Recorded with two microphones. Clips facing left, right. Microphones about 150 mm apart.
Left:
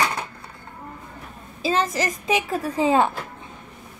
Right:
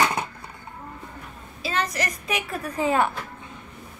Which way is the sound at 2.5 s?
90° left.